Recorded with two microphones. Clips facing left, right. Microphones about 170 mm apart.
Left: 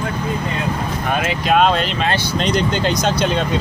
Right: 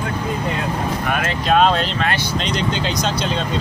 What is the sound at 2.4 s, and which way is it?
Speech, 50° left (ahead or behind).